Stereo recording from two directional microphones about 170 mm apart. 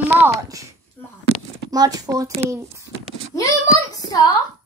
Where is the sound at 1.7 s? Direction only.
20° right (ahead or behind).